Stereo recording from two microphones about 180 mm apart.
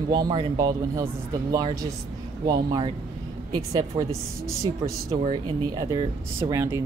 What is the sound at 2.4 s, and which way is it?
Speech, 25° right (ahead or behind).